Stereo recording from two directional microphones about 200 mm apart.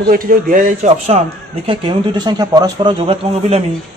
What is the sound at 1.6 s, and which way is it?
A man's voice, 25° right (ahead or behind).